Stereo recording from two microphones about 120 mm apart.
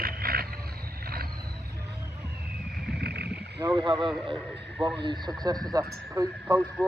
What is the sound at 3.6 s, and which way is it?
Speech, 35° right (ahead or behind).